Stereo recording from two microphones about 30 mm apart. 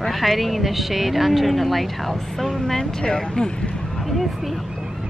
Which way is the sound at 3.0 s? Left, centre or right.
Left.